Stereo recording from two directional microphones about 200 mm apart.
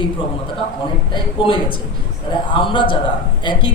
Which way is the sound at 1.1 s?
25° left (ahead or behind).